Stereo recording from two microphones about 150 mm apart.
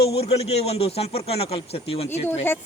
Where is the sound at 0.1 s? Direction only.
40° left (ahead or behind).